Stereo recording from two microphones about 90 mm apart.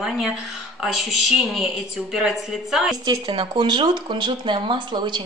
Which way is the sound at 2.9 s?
45° right (ahead or behind).